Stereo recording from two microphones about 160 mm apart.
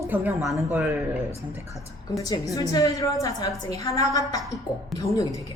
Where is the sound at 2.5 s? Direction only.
20° left (ahead or behind).